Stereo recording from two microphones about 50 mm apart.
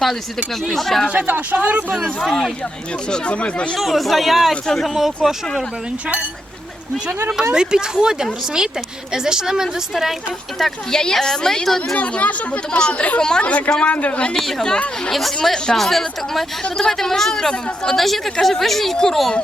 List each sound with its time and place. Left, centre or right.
0.7 s a woman's voice: centre
1.1 s speech: right
3.1 s speech: left
3.8 s a woman's voice: centre
4.9 s a woman's voice: centre
7.5 s a woman's voice: centre
10.6 s a woman's voice: centre
11.9 s a woman's voice: left; by 19.3 s centre